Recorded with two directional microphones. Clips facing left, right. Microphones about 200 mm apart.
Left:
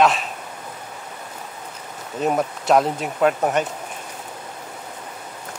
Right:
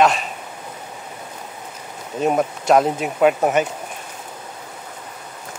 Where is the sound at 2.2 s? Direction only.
Centre (ahead or behind).